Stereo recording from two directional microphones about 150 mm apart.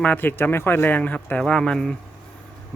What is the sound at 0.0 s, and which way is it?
Speech, 10° left (ahead or behind).